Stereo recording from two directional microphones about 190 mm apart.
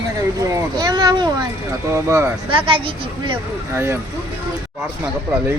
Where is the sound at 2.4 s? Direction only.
30° right (ahead or behind).